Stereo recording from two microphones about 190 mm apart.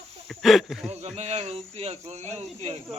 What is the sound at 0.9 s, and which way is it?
Speech, 35° right (ahead or behind).